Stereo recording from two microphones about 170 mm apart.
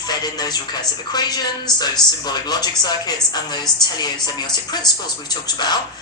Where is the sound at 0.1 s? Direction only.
25° left (ahead or behind).